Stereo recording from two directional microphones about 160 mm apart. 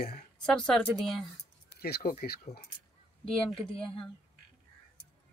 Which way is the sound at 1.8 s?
75° left (ahead or behind).